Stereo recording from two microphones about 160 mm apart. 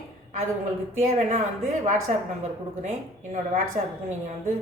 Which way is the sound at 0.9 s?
45° right (ahead or behind).